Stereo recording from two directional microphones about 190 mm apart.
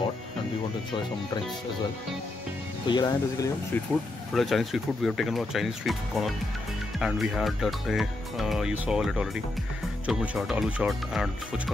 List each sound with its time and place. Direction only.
2.9 s speech: 20° left (ahead or behind)
4.3 s speech: centre (ahead or behind)